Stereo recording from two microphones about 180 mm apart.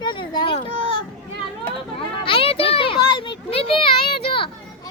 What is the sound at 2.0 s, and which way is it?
Children playing, 30° left (ahead or behind).